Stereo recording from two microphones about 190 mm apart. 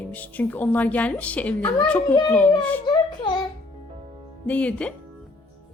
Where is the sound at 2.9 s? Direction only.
25° left (ahead or behind).